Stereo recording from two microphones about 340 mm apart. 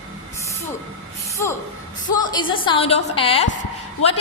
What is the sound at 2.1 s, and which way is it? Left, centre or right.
A woman's voice, centre.